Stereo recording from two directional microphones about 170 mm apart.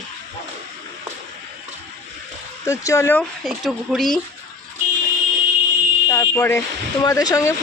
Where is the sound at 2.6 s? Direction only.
15° left (ahead or behind).